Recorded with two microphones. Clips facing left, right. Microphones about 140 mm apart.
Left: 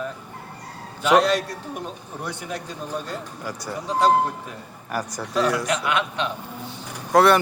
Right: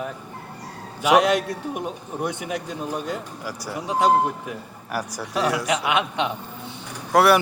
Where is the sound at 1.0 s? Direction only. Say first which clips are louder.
Right 1 dB; 10° right (ahead or behind).